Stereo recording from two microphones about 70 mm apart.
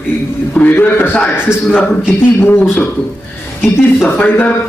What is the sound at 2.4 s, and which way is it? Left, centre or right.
Speech, left.